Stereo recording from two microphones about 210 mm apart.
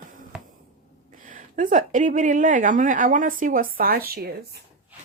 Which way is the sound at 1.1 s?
40° right (ahead or behind).